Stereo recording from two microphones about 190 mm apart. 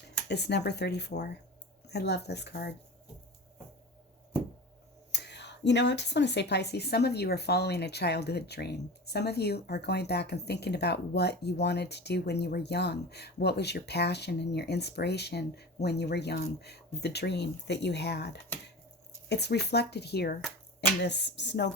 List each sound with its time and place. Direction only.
0.3 s a woman's voice: 60° left (ahead or behind)
5.1 s a woman's voice: 65° left (ahead or behind)